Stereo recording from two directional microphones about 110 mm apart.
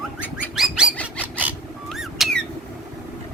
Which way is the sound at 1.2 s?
15° right (ahead or behind).